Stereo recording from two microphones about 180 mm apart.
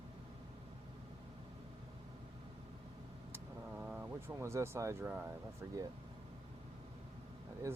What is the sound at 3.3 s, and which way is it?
Vehicle, 10° right (ahead or behind).